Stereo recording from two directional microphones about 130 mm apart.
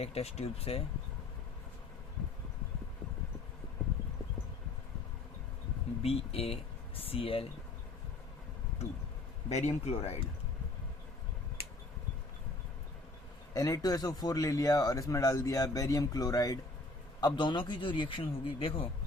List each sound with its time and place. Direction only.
0.0 s speech: 50° left (ahead or behind)
6.0 s speech: 50° left (ahead or behind)
8.8 s speech: 55° left (ahead or behind)
13.5 s a man's voice: 25° left (ahead or behind); by 18.9 s 45° left (ahead or behind)